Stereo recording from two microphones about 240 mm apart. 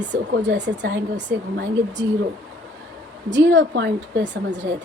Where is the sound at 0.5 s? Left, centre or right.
Right.